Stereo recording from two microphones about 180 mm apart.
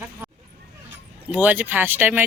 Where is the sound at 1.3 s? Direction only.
10° right (ahead or behind).